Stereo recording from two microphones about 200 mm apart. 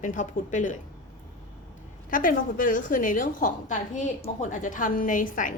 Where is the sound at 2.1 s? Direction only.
40° left (ahead or behind).